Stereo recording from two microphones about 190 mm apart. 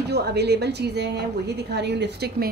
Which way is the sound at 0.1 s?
60° right (ahead or behind).